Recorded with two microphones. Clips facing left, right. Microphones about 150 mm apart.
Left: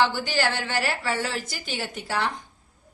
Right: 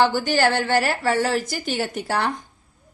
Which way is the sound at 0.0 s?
45° right (ahead or behind).